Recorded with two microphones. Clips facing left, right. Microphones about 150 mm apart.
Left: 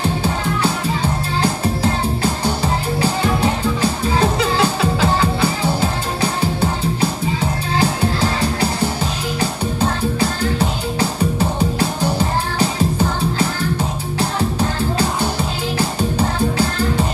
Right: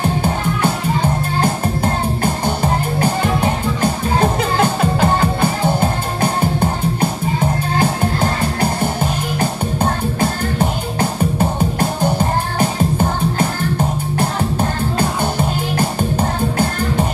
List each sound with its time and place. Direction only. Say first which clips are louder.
1.4 s music: even; 50° right (ahead or behind)